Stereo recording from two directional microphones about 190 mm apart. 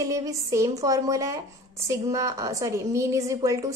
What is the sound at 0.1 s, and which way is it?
A woman's voice, 15° right (ahead or behind).